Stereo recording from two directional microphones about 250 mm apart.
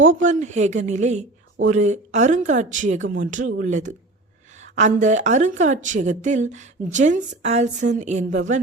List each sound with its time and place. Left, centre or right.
0.0 s speech: right